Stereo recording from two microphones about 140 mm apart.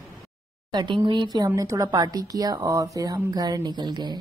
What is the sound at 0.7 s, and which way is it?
Speech, 35° right (ahead or behind).